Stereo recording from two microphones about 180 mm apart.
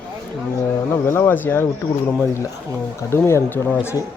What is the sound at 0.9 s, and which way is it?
Speech, 15° left (ahead or behind).